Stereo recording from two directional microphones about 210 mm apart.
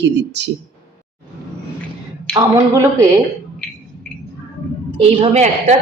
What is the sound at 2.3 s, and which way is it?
Speech, 15° right (ahead or behind).